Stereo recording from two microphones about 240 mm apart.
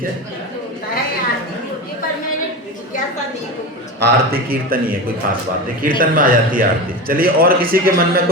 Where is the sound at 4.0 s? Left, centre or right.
Right.